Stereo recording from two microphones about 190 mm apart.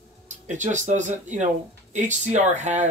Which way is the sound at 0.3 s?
40° right (ahead or behind).